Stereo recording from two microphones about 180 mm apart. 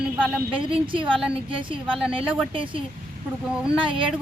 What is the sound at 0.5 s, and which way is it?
A woman's voice, 30° right (ahead or behind).